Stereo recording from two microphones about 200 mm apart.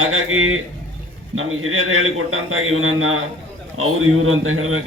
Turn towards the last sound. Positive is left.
turn(degrees=-90)